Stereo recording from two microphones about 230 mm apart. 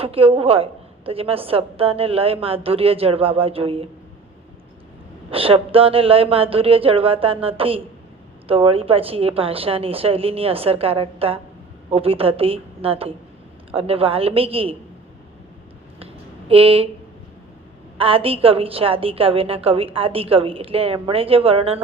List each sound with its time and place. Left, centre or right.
0.0 s a woman's voice: right
5.3 s a woman's voice: right
16.5 s a woman's voice: right
17.9 s a woman's voice: right